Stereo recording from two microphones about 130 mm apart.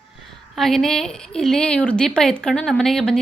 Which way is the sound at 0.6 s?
Centre (ahead or behind).